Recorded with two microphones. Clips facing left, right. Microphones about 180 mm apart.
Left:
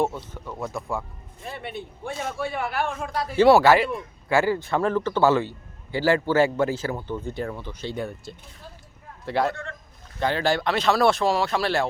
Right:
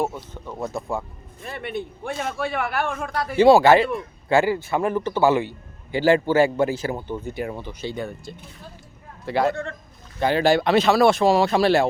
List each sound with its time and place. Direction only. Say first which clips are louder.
0.0 s a man's voice: left 1 dB; 15° right (ahead or behind)
0.6 s speech: right 3 dB; 25° right (ahead or behind)
1.5 s a man's voice: right 4 dB; 65° right (ahead or behind)
3.3 s a man's voice: right 2 dB; 20° right (ahead or behind)
7.9 s a man's voice: right 1 dB; 5° left (ahead or behind)
11.2 s a man's voice: right 5 dB; 15° right (ahead or behind)